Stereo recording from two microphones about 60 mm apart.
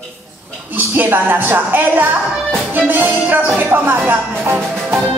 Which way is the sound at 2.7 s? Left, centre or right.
Right.